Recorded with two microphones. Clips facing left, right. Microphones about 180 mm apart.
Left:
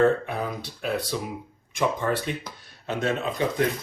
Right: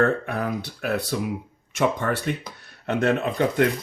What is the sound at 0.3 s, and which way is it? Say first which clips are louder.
Speech: right 3 dB; 70° right (ahead or behind).